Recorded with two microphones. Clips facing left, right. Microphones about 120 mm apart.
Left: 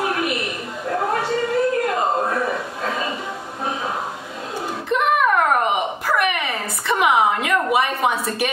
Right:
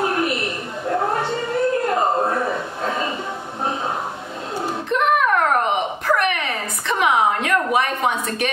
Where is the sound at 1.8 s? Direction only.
30° right (ahead or behind).